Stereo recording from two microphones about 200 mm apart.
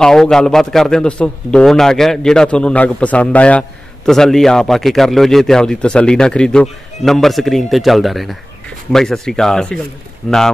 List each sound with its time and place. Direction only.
0.0 s a man's voice: centre (ahead or behind)